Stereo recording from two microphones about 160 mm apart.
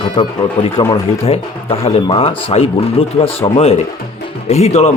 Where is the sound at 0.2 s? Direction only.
35° left (ahead or behind).